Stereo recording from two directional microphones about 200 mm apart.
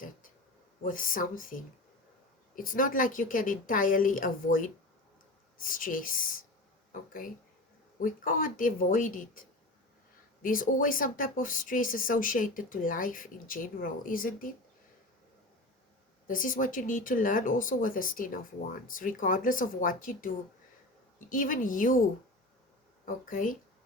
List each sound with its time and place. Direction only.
0.8 s speech: 45° left (ahead or behind)
7.9 s speech: 45° left (ahead or behind)
16.2 s speech: 40° left (ahead or behind)
23.0 s speech: 40° left (ahead or behind)